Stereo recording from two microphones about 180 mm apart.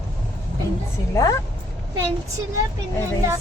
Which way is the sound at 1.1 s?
20° left (ahead or behind).